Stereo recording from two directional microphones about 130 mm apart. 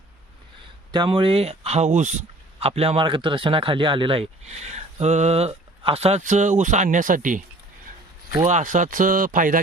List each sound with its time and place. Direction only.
0.9 s speech: 40° right (ahead or behind); by 7.4 s 90° right
8.4 s speech: 70° right (ahead or behind); by 9.6 s 90° right